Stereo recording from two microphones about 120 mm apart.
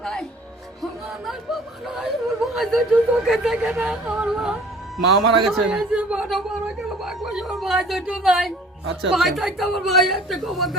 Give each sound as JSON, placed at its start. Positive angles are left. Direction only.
{"t": 0.0, "sound": "music", "side_deg": 5}
{"t": 1.9, "sound": "a woman's voice", "side_deg": -5}